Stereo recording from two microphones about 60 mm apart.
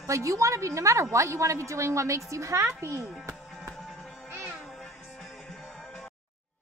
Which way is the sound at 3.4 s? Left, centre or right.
Centre.